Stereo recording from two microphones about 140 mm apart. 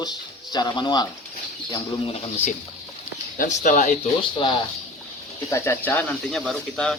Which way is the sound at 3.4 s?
65° left (ahead or behind).